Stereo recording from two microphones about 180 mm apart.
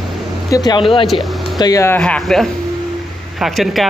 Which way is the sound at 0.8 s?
Centre (ahead or behind).